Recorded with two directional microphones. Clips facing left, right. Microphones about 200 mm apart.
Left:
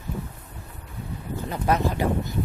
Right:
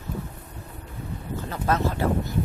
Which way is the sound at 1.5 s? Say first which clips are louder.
Left 1 dB; 15° left (ahead or behind).